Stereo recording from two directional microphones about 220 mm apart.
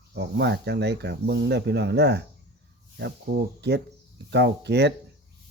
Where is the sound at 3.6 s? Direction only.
50° right (ahead or behind).